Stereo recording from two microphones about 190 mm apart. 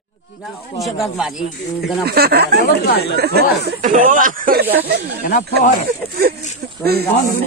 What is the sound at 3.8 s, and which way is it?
Speech, 45° right (ahead or behind).